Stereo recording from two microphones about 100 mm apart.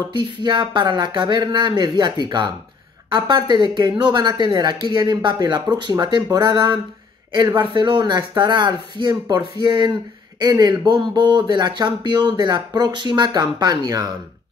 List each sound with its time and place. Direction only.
0.1 s speech: 50° right (ahead or behind)